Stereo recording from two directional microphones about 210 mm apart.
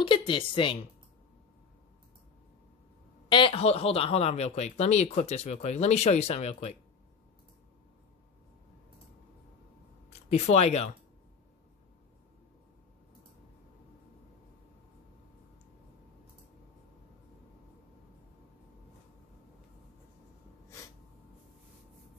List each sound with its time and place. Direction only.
0.0 s a woman's voice: 25° left (ahead or behind)
3.3 s speech: 25° left (ahead or behind)
10.3 s speech: 30° left (ahead or behind)